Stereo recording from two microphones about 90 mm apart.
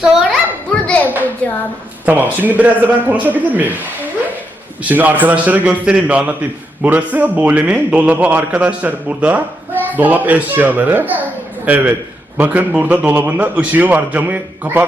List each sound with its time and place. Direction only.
0.0 s children playing: 5° right (ahead or behind)
0.7 s a sound: 10° left (ahead or behind)
2.0 s a man's voice: 20° right (ahead or behind)
4.8 s a man's voice: 15° right (ahead or behind)